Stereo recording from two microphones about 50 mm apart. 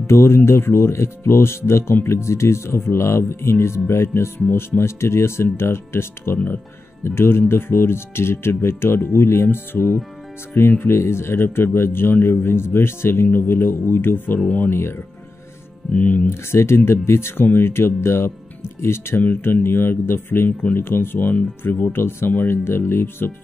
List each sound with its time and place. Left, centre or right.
0.0 s speech: left
6.3 s speech: left
7.1 s speech: left
14.7 s speech: left
15.9 s speech: left
16.3 s speech: left
21.9 s speech: left